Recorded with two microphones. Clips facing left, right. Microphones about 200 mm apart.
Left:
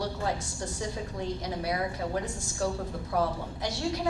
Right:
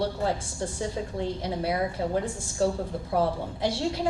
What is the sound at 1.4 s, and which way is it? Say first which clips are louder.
A woman's voice: right 4 dB; 30° right (ahead or behind).